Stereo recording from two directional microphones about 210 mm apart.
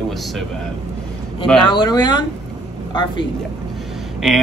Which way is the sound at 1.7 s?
20° left (ahead or behind).